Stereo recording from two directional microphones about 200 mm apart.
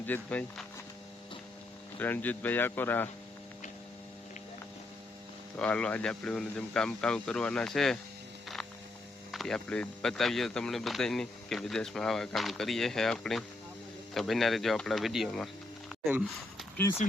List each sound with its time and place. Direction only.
0.0 s speech: 10° left (ahead or behind)
2.0 s speech: 10° left (ahead or behind)
5.5 s speech: 5° left (ahead or behind)
9.3 s speech: centre (ahead or behind)
17.0 s speech: 35° left (ahead or behind)